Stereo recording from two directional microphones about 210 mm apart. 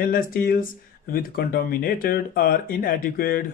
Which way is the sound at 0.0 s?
40° left (ahead or behind).